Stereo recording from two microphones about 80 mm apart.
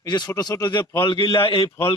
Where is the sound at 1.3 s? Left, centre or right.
Left.